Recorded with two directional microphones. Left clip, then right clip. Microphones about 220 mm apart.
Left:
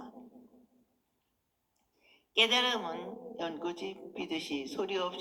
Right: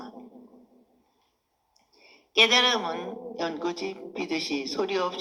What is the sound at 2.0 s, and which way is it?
A woman's voice, 25° right (ahead or behind).